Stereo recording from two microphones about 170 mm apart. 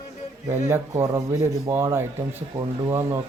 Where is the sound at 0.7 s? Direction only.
15° right (ahead or behind).